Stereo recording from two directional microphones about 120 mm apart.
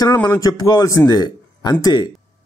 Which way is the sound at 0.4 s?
30° left (ahead or behind).